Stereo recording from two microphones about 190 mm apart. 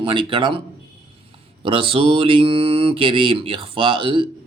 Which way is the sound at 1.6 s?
30° right (ahead or behind).